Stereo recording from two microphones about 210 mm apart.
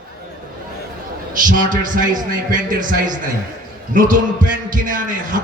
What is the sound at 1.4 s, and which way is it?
Speech, 40° right (ahead or behind).